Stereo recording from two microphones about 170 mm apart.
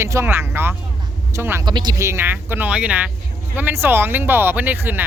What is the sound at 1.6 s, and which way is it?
Speech, 25° right (ahead or behind).